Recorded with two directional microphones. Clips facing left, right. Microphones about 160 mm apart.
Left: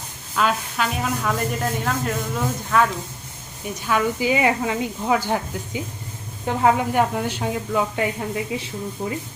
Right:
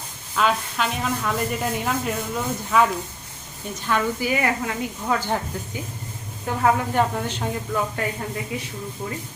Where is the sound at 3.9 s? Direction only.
5° left (ahead or behind).